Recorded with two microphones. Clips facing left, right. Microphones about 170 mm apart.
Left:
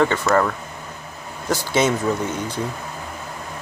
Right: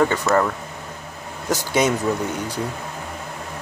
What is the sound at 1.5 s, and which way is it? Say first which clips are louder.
Speech: even; 15° right (ahead or behind).